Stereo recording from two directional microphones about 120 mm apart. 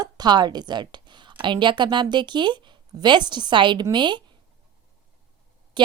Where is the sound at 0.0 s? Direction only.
35° right (ahead or behind).